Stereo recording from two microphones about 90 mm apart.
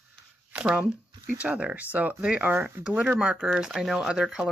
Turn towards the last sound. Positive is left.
turn(degrees=-10)  # may be behind; listen again after turning